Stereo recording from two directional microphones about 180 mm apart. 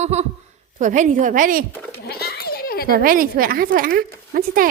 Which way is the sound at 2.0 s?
60° left (ahead or behind).